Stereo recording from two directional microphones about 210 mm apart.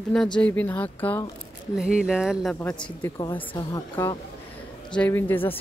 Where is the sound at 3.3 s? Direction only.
10° left (ahead or behind).